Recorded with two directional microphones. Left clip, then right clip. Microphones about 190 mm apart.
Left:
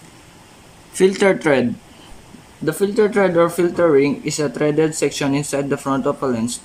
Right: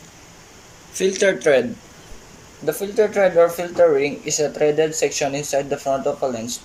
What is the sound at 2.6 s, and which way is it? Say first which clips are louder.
Speech: left 2 dB; 45° left (ahead or behind).